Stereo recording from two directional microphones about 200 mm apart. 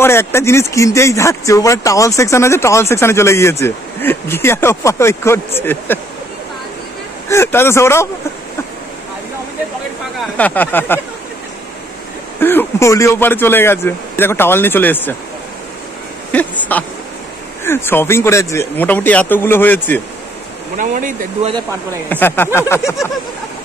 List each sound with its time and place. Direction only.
0.0 s speech: 10° left (ahead or behind)
7.2 s speech: 10° left (ahead or behind)
10.3 s speech: 10° left (ahead or behind)
12.4 s speech: 10° left (ahead or behind)
16.3 s speech: 10° left (ahead or behind)
20.7 s speech: 40° right (ahead or behind)
22.1 s speech: 10° left (ahead or behind)